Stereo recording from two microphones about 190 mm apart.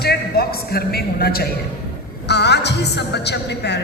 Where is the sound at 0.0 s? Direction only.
55° left (ahead or behind).